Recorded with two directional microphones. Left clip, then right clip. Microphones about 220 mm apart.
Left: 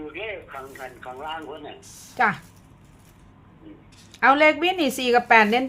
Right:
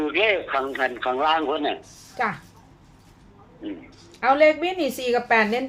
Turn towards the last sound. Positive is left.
turn(degrees=15)  # may be behind; listen again after turning